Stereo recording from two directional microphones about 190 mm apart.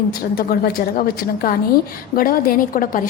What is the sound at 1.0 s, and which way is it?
A woman's voice, 50° left (ahead or behind).